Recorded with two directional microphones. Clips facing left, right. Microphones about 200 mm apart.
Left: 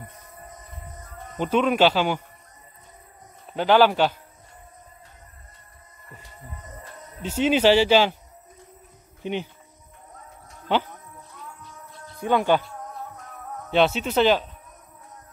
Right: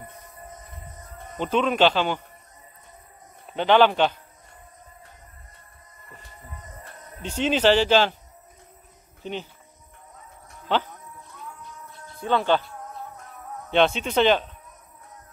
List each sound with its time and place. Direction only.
1.4 s speech: 10° left (ahead or behind)
3.5 s speech: 5° left (ahead or behind)
7.2 s speech: 5° left (ahead or behind)
9.2 s speech: 15° left (ahead or behind)
12.2 s speech: 15° left (ahead or behind)
13.7 s a man's voice: 5° left (ahead or behind)